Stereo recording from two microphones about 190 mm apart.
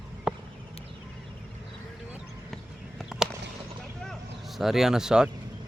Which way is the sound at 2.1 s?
Centre (ahead or behind).